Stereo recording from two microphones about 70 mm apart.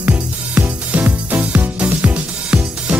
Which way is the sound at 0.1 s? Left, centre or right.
Right.